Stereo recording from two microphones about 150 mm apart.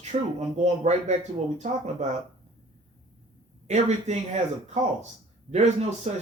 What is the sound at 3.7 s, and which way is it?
Speech, 50° right (ahead or behind).